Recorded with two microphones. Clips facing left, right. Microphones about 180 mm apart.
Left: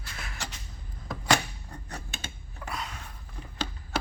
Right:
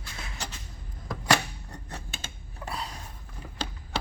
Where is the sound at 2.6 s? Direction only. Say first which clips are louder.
Right 1 dB; 35° right (ahead or behind).